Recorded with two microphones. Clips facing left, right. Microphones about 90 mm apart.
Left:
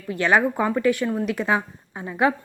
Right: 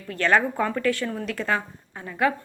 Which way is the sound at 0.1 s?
10° left (ahead or behind).